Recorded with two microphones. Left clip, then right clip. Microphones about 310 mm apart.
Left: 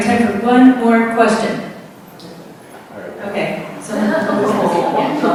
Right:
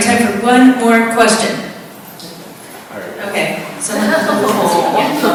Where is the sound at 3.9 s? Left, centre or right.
Centre.